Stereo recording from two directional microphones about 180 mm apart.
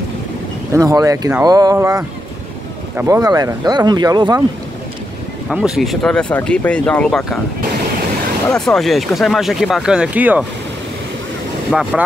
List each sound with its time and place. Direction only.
0.7 s speech: 20° right (ahead or behind)
5.5 s speech: centre (ahead or behind)
8.5 s speech: 5° left (ahead or behind)
11.7 s speech: 5° right (ahead or behind)